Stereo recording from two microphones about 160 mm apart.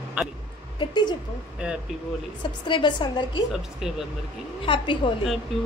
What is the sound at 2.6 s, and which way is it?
Speech, 30° left (ahead or behind).